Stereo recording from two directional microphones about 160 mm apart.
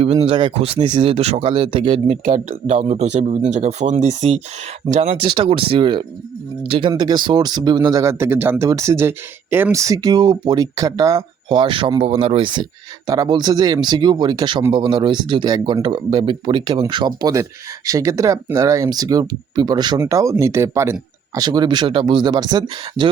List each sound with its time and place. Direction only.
0.0 s speech: 40° right (ahead or behind)
2.2 s speech: 45° right (ahead or behind); by 23.0 s 30° right (ahead or behind)